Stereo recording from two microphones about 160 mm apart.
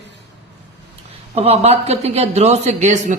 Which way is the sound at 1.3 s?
40° right (ahead or behind).